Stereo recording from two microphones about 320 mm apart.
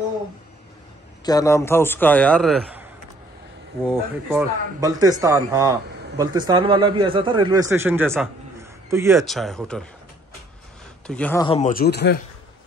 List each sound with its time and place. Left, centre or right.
1.2 s a man's voice: centre
11.1 s speech: centre; by 12.2 s left